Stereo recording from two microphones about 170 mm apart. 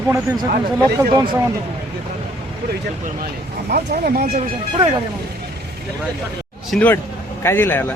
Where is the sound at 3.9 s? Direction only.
50° right (ahead or behind).